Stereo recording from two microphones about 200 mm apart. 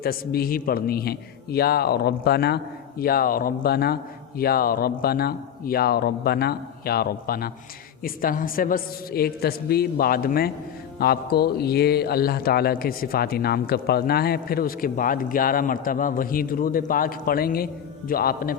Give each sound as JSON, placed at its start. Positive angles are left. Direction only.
{"t": 0.0, "sound": "speech", "side_deg": 50}